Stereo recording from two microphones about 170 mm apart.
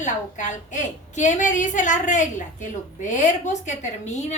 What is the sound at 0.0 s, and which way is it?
A woman's voice, 45° left (ahead or behind).